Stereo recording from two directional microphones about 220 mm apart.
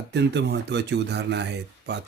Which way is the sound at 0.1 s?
50° right (ahead or behind).